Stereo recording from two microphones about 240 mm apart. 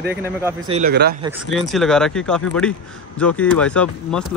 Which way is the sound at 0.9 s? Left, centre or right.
Right.